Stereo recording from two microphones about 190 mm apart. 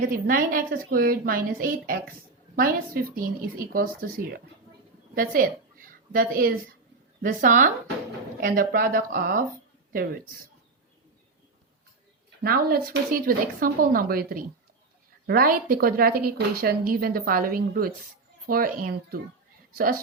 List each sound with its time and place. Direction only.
0.0 s a woman's voice: 45° right (ahead or behind)
12.4 s a woman's voice: 50° right (ahead or behind)